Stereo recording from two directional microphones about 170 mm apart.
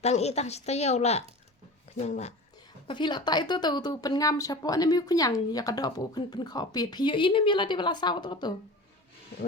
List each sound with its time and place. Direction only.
0.0 s a woman's voice: 40° left (ahead or behind)
2.8 s a woman's voice: 25° left (ahead or behind)